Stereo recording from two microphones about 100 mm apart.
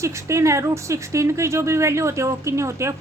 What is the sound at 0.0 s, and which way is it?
Speech, 30° right (ahead or behind).